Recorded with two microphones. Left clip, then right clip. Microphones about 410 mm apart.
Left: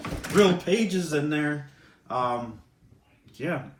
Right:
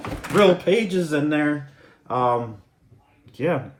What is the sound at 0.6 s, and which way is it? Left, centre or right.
Speech, right.